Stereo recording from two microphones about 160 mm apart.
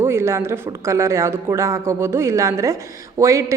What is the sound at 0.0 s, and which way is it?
A woman's voice, 15° right (ahead or behind).